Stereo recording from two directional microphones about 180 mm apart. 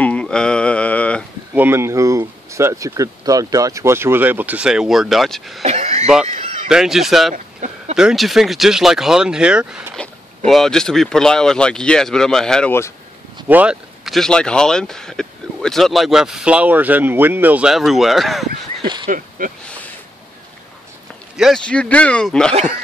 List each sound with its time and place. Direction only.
0.0 s a sound: 5° left (ahead or behind)
1.5 s speech: 10° right (ahead or behind)
5.6 s a sound: 35° right (ahead or behind)
6.2 s fowl: 40° right (ahead or behind)
6.7 s speech: centre (ahead or behind)
13.5 s speech: 5° right (ahead or behind)
18.8 s a sound: 25° right (ahead or behind)
19.0 s speech: 50° right (ahead or behind)
21.4 s speech: centre (ahead or behind)